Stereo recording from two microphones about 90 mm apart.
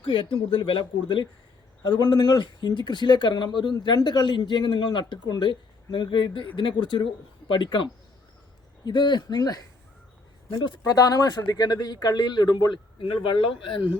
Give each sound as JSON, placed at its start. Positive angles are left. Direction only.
{"t": 0.0, "sound": "speech", "side_deg": 70}
{"t": 13.0, "sound": "speech", "side_deg": 70}